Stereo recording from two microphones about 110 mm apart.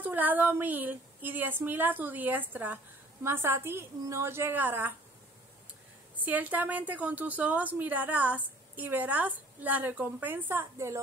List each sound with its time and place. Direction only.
0.0 s a woman's voice: 15° right (ahead or behind)
6.1 s a woman's voice: 15° right (ahead or behind)